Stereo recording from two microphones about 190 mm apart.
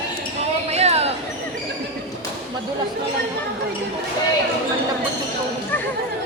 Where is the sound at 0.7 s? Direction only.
35° right (ahead or behind).